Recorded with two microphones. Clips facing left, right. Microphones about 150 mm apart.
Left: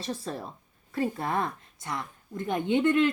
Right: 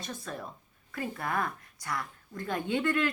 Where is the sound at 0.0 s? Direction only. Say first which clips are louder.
Left 5 dB; 30° left (ahead or behind).